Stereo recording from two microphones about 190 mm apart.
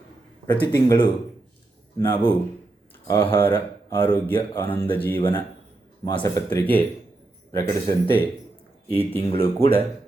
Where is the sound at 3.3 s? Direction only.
10° left (ahead or behind).